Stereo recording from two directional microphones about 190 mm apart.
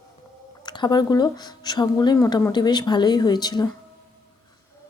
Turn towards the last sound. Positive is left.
turn(degrees=20)  # may be behind; listen again after turning